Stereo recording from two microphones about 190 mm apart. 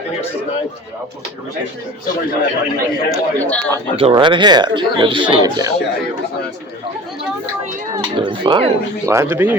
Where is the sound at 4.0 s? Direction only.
25° right (ahead or behind).